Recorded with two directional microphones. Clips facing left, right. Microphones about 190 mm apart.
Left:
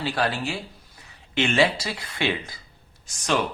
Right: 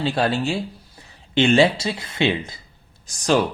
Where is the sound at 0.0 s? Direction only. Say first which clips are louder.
Right 5 dB; 25° right (ahead or behind).